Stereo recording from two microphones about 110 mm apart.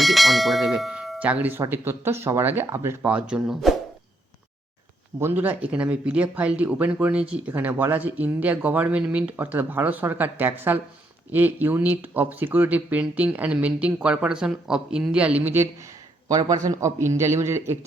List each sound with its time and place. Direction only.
0.0 s bell: centre (ahead or behind)
1.2 s speech: 15° right (ahead or behind)
3.1 s speech: 10° right (ahead or behind)
5.2 s speech: 15° right (ahead or behind)